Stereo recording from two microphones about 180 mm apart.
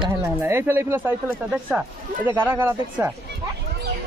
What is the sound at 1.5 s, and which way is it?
Speech, centre (ahead or behind).